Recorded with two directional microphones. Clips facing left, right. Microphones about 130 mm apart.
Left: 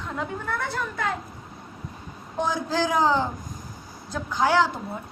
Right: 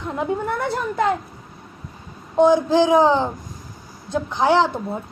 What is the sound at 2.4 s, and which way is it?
A woman's voice, 20° right (ahead or behind).